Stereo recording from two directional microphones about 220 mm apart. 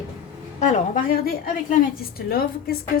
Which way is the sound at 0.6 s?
35° left (ahead or behind).